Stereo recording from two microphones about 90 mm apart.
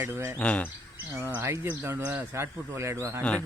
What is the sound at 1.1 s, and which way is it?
Speech, 25° right (ahead or behind).